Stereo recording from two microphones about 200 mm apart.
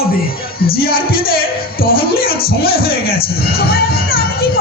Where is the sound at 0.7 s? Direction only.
50° left (ahead or behind).